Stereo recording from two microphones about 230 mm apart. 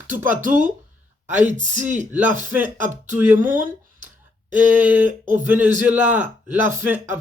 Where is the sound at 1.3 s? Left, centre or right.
Right.